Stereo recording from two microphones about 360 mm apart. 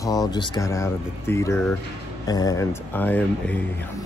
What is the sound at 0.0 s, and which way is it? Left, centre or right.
Speech, centre.